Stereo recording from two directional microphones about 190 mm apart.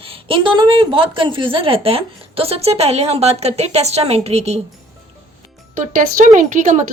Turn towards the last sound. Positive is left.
turn(degrees=-40)  # may be behind; listen again after turning